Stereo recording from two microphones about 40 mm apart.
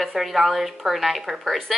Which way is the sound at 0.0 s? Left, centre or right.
Centre.